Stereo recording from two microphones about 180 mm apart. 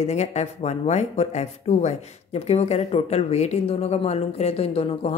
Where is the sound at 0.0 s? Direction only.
40° left (ahead or behind).